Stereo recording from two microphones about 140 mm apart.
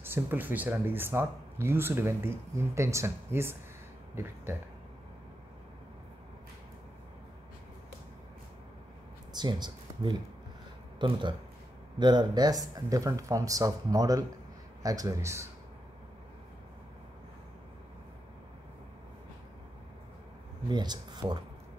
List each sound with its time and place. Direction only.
0.0 s speech: 15° right (ahead or behind)
9.3 s speech: 30° right (ahead or behind)
20.6 s speech: 30° right (ahead or behind)